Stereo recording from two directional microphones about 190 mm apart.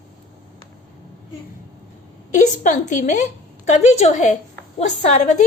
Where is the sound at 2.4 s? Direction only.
40° left (ahead or behind).